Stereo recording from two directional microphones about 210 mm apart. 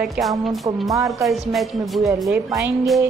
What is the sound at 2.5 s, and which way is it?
Speech, 10° right (ahead or behind).